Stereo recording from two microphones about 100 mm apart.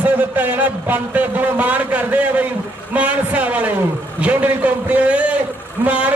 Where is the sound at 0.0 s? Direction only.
15° right (ahead or behind).